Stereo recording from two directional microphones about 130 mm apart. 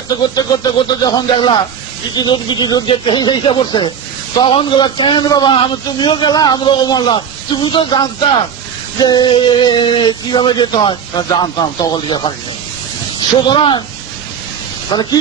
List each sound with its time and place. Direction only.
0.4 s a man's voice: 30° left (ahead or behind)
13.5 s a man's voice: 40° left (ahead or behind)
14.9 s speech: 35° left (ahead or behind)